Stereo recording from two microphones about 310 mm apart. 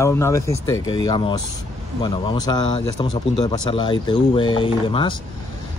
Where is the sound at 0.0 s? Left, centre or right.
Centre.